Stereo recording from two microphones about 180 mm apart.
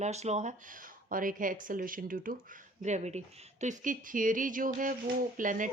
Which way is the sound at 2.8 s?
40° right (ahead or behind).